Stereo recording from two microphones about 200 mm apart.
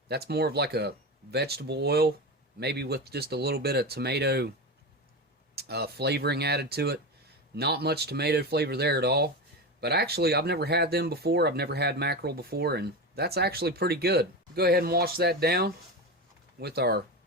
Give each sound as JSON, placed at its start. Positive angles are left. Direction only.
{"t": 0.1, "sound": "speech", "side_deg": -55}
{"t": 5.5, "sound": "speech", "side_deg": -55}